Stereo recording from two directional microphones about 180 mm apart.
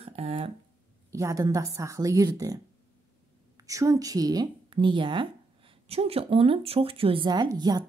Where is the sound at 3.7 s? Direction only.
20° right (ahead or behind).